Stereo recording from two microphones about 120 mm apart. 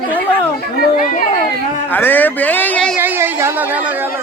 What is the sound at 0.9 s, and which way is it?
Speech, 90° left.